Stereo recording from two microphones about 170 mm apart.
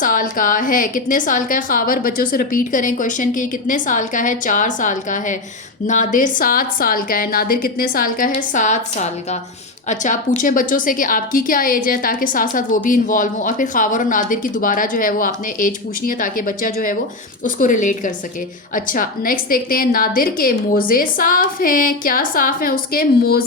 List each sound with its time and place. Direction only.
0.0 s a woman's voice: 55° left (ahead or behind)